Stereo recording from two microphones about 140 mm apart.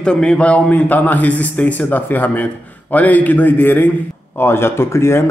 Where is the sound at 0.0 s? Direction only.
5° left (ahead or behind).